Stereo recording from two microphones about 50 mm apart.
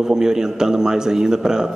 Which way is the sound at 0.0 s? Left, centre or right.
Centre.